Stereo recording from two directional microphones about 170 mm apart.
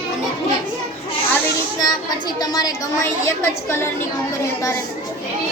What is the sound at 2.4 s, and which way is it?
A woman's voice, 25° left (ahead or behind).